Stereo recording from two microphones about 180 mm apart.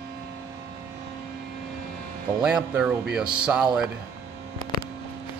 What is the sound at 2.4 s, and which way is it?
Music, 5° right (ahead or behind).